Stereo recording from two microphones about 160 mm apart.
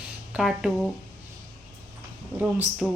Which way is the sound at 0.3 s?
Centre (ahead or behind).